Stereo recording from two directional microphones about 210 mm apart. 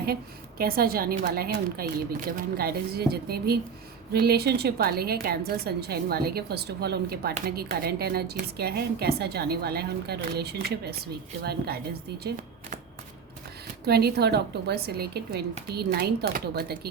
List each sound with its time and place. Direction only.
0.6 s a woman's voice: 45° right (ahead or behind)
13.8 s a woman's voice: 50° right (ahead or behind)